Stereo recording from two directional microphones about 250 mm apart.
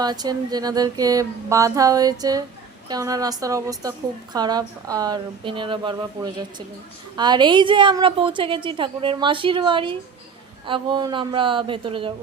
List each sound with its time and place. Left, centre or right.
0.0 s a woman's voice: centre